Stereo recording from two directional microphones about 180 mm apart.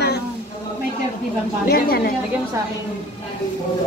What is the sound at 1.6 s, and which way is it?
Speech, 60° left (ahead or behind).